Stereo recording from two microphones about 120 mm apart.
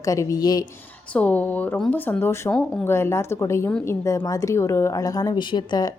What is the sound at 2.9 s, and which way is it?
A woman's voice, 20° left (ahead or behind).